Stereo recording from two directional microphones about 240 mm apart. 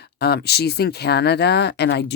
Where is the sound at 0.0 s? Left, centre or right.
Left.